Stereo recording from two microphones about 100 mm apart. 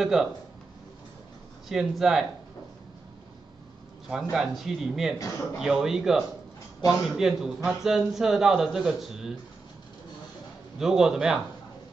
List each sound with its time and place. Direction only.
0.0 s a man's voice: 5° right (ahead or behind)
1.7 s a man's voice: centre (ahead or behind)
4.1 s a man's voice: 5° right (ahead or behind)
10.8 s a man's voice: 5° right (ahead or behind)